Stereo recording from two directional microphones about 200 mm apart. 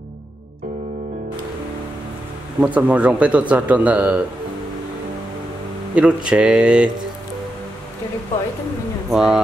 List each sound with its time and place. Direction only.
2.6 s speech: 5° right (ahead or behind)
5.9 s speech: 5° right (ahead or behind)
9.1 s speech: 5° right (ahead or behind)